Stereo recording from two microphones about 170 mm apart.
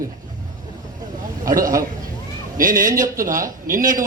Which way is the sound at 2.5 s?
55° right (ahead or behind).